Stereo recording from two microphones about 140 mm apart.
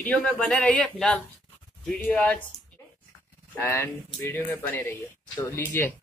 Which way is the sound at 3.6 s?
20° left (ahead or behind).